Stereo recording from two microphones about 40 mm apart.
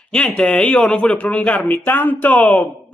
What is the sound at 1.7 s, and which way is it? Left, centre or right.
Speech, left.